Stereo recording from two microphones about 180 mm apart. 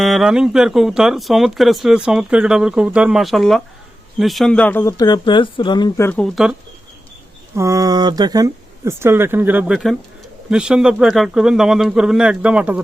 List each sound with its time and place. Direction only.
0.0 s speech: centre (ahead or behind); by 6.1 s 25° left (ahead or behind)
6.1 s speech: 5° left (ahead or behind)
7.5 s speech: 15° right (ahead or behind)